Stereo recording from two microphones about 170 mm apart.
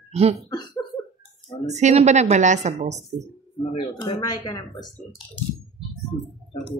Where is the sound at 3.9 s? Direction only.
25° left (ahead or behind).